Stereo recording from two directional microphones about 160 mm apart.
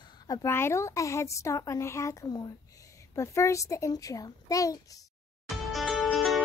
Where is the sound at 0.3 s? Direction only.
20° left (ahead or behind).